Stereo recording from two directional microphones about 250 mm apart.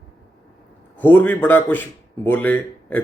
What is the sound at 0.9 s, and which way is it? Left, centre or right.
Speech, centre.